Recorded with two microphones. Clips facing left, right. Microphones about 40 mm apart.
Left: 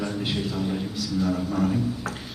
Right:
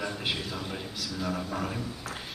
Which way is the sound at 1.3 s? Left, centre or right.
Right.